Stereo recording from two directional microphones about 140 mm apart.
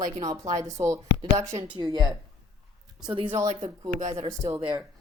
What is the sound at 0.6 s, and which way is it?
Speech, 20° right (ahead or behind).